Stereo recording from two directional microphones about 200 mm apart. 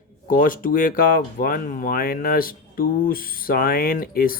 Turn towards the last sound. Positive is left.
turn(degrees=45)  # may be behind; listen again after turning